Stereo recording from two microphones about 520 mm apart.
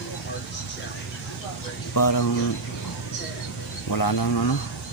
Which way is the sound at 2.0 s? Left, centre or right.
Left.